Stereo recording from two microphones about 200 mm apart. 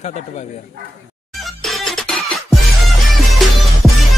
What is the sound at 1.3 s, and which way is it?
Music, centre (ahead or behind).